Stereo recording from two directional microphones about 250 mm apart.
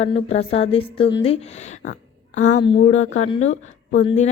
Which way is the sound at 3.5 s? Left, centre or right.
Left.